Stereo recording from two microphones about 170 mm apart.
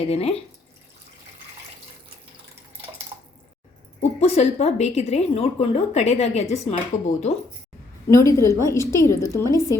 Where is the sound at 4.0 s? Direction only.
40° left (ahead or behind).